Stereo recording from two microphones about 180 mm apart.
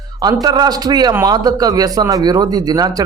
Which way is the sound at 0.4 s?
20° right (ahead or behind).